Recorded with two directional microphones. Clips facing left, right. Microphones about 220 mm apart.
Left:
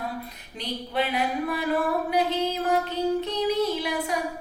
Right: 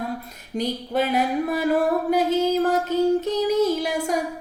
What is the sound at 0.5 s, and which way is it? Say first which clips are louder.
Music: right 6 dB; 45° right (ahead or behind).